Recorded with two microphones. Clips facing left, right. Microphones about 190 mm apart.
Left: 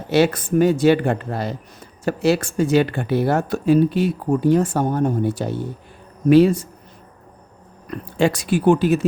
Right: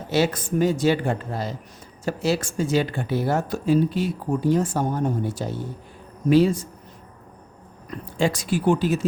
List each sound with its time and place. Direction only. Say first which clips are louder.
0.1 s speech: left 5 dB; 60° left (ahead or behind)
7.9 s speech: left 4 dB; 65° left (ahead or behind)